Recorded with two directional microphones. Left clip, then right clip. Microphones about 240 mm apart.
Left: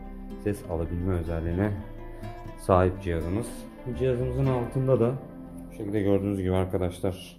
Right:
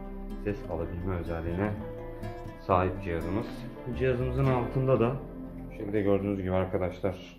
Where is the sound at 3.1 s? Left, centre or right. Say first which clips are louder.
Left 1 dB; centre.